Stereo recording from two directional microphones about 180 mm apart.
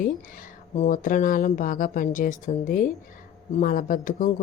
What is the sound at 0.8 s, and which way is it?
A woman's voice, 50° left (ahead or behind).